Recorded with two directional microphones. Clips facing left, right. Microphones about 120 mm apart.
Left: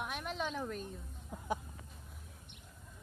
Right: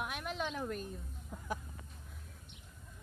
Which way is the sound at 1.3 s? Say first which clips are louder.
Left 2 dB; 15° left (ahead or behind).